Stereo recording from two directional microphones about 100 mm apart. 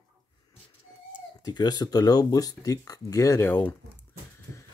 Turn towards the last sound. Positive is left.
turn(degrees=20)  # may be behind; listen again after turning